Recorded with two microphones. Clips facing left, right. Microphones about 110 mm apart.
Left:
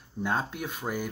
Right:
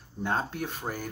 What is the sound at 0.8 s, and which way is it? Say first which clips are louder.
Speech: left 5 dB; 20° right (ahead or behind).